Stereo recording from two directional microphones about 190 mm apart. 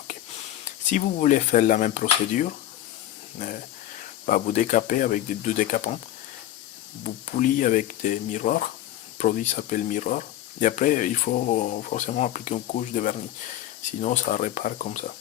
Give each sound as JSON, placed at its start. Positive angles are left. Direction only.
{"t": 0.9, "sound": "speech", "side_deg": 40}
{"t": 7.0, "sound": "speech", "side_deg": 45}